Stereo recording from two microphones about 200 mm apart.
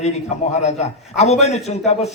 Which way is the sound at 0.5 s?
35° left (ahead or behind).